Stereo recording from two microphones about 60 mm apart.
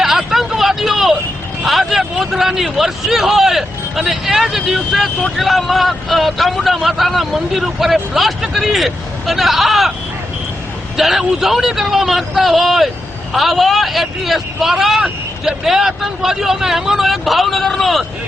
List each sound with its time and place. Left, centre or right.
0.0 s vehicle: centre
1.6 s a man's voice: centre
10.9 s a man's voice: centre